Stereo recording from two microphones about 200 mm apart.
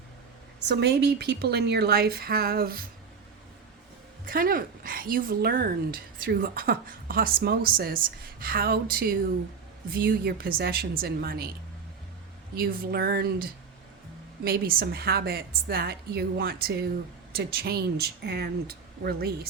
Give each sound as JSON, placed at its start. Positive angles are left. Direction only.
{"t": 0.7, "sound": "speech", "side_deg": -55}
{"t": 4.3, "sound": "speech", "side_deg": -45}
{"t": 12.5, "sound": "speech", "side_deg": -50}